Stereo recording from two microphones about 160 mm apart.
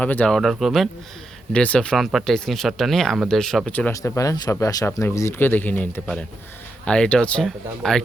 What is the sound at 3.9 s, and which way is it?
Speech, 20° left (ahead or behind).